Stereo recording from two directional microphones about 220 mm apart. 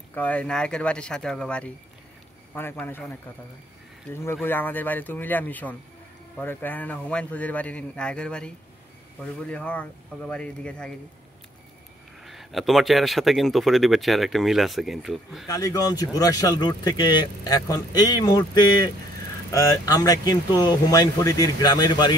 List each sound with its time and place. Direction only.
0.1 s speech: 5° left (ahead or behind)
12.2 s speech: centre (ahead or behind)
15.4 s speech: 15° left (ahead or behind)